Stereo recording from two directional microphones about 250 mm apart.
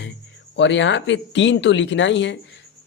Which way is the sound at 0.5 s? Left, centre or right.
Left.